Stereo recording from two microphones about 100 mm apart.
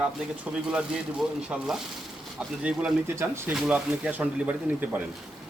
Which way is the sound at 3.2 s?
25° right (ahead or behind).